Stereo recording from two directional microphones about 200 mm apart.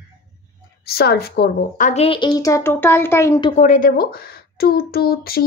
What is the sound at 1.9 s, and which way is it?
A woman's voice, 30° left (ahead or behind).